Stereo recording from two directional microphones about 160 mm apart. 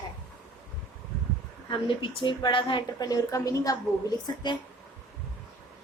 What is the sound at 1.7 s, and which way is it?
A woman's voice, 30° left (ahead or behind).